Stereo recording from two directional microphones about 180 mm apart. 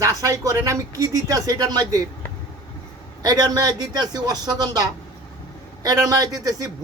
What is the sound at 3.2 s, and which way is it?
A man's voice, 20° right (ahead or behind).